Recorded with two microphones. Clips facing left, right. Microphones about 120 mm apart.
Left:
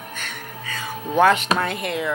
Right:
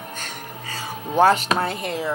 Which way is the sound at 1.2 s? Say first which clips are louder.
Even; 35° right (ahead or behind).